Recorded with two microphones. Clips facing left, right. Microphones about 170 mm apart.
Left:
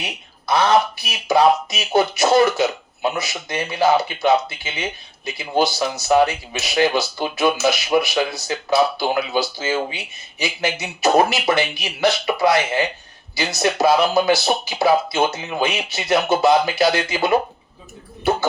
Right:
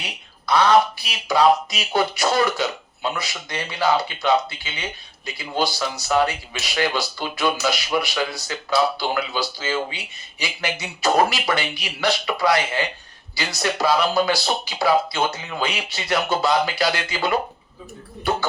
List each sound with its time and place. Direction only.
0.0 s speech: 25° left (ahead or behind)